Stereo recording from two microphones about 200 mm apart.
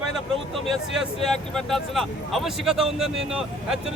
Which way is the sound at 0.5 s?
Centre (ahead or behind).